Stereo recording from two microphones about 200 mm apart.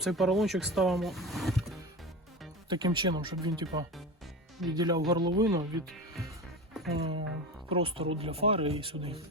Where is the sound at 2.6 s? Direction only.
20° right (ahead or behind).